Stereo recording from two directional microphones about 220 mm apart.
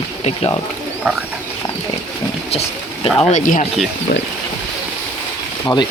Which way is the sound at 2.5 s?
30° left (ahead or behind).